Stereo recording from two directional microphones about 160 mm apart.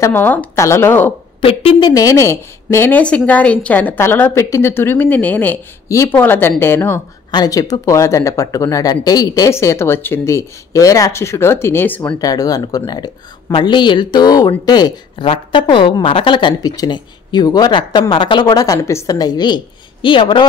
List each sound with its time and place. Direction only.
0.0 s a woman's voice: 10° left (ahead or behind)
1.4 s a woman's voice: 35° left (ahead or behind); by 7.0 s 15° left (ahead or behind)
7.2 s speech: 25° left (ahead or behind)
12.2 s speech: 20° left (ahead or behind)